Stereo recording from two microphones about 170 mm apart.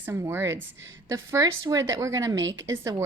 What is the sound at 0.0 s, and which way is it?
A woman's voice, 15° right (ahead or behind).